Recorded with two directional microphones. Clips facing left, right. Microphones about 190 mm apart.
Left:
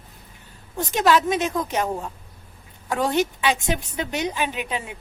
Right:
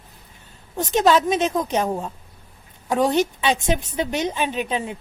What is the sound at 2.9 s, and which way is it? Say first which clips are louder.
A woman's voice: right 3 dB; 20° right (ahead or behind).